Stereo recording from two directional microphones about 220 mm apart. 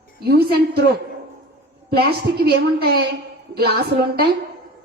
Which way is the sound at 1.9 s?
45° right (ahead or behind).